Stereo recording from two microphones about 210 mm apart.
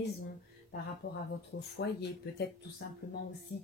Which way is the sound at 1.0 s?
50° left (ahead or behind).